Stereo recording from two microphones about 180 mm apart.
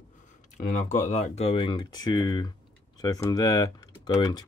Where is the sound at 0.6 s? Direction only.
40° left (ahead or behind).